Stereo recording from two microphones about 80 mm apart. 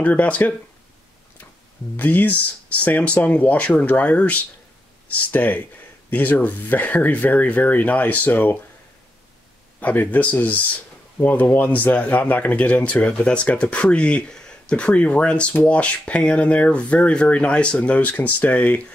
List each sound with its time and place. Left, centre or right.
0.0 s speech: centre
2.0 s speech: left
9.8 s speech: left